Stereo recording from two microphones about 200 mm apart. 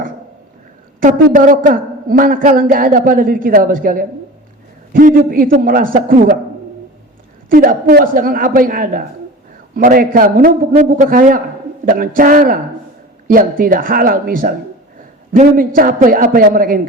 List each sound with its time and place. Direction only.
1.0 s a man's voice: 40° right (ahead or behind)
7.5 s a man's voice: 45° right (ahead or behind)